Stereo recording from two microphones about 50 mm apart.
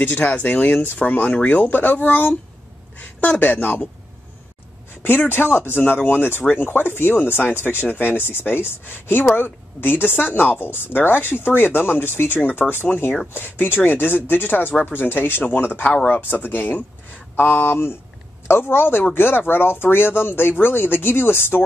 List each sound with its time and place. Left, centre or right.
0.0 s speech: left
5.3 s speech: left